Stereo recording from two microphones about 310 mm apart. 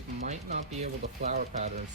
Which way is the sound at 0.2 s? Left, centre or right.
Right.